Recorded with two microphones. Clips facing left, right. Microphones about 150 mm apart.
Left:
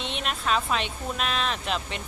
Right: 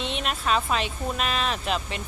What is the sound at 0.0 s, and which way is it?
Speech, centre (ahead or behind).